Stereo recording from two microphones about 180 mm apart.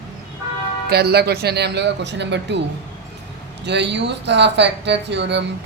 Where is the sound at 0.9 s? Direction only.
65° right (ahead or behind).